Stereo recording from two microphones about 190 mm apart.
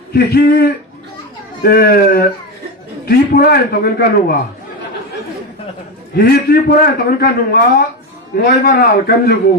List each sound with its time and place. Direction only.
0.1 s a man's voice: 55° left (ahead or behind)
6.1 s a man's voice: 55° left (ahead or behind)